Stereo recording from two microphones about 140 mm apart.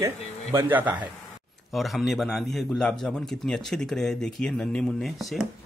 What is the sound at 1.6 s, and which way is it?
A man's voice, centre (ahead or behind).